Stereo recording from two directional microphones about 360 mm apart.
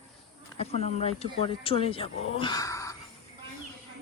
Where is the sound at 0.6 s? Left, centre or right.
Centre.